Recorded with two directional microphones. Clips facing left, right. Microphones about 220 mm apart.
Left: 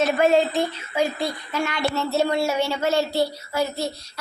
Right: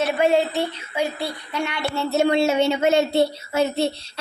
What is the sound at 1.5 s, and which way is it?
A woman's voice, 15° right (ahead or behind).